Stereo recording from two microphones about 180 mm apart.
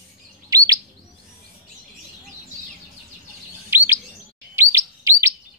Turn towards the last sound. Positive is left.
turn(degrees=-15)  # may be behind; listen again after turning